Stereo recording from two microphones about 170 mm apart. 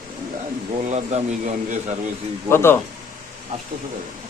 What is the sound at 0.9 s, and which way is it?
Speech, 40° right (ahead or behind).